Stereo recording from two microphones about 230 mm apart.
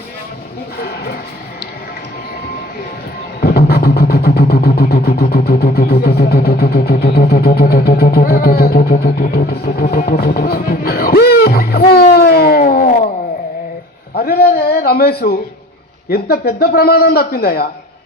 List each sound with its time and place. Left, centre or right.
0.8 s a sound: left
3.4 s vehicle: left
14.2 s speech: left